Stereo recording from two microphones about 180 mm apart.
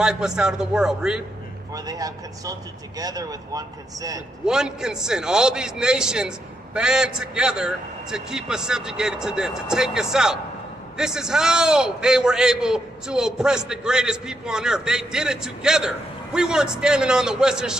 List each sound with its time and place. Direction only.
0.0 s a man's voice: 5° right (ahead or behind)
1.9 s speech: 20° right (ahead or behind)
4.5 s a man's voice: 5° right (ahead or behind)